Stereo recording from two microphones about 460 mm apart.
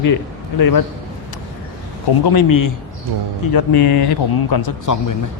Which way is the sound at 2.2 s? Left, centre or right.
Left.